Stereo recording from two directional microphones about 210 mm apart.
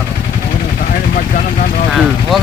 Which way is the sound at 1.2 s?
40° left (ahead or behind).